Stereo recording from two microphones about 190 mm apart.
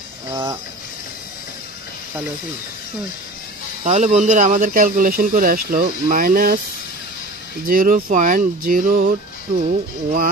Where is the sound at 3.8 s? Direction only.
35° right (ahead or behind).